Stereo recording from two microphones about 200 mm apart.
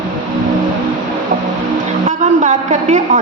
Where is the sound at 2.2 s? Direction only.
35° right (ahead or behind).